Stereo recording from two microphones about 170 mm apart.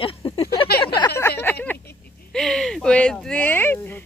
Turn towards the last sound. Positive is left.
turn(degrees=10)  # may be behind; listen again after turning